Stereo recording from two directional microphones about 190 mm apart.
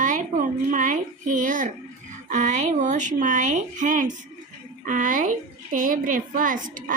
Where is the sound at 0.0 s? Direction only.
40° right (ahead or behind).